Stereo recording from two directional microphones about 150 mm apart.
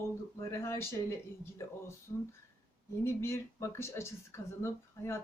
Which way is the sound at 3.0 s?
15° left (ahead or behind).